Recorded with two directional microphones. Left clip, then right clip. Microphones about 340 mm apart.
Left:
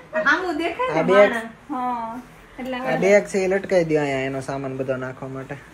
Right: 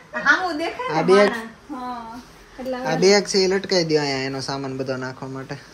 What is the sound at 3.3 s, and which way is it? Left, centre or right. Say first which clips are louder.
Speech: right 1 dB; centre.